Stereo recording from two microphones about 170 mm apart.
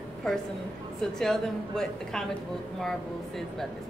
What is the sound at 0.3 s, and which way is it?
Speech, 5° left (ahead or behind).